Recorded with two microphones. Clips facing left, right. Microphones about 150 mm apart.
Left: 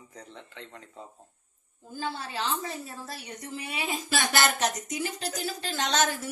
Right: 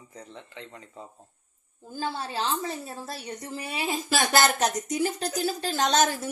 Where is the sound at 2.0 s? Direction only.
35° right (ahead or behind).